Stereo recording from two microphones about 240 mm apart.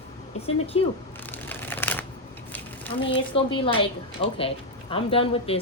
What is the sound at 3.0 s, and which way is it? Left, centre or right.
A woman's voice, left.